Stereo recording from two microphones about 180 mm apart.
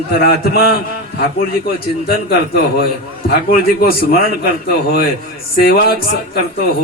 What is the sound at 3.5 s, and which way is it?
Speech, 55° left (ahead or behind).